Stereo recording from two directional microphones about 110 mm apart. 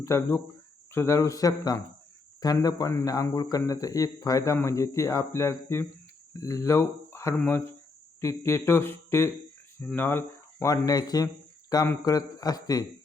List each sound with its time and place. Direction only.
0.0 s speech: 30° left (ahead or behind)